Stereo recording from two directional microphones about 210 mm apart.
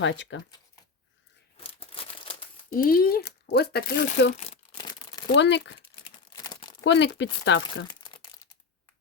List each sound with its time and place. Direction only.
0.0 s speech: 60° left (ahead or behind)
1.5 s crumpling: 25° left (ahead or behind)
2.7 s speech: 45° left (ahead or behind); by 5.2 s 20° left (ahead or behind)
5.3 s speech: 55° left (ahead or behind)
6.3 s crumpling: 20° left (ahead or behind)
6.8 s speech: 55° left (ahead or behind)
7.9 s crumpling: 20° left (ahead or behind)